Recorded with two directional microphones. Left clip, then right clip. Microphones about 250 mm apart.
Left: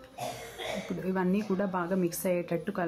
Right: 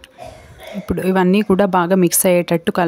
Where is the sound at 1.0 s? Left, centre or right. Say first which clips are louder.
Right 16 dB; right.